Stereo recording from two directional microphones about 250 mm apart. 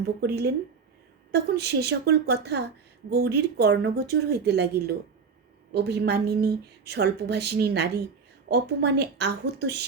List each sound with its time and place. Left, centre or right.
0.2 s a woman's voice: right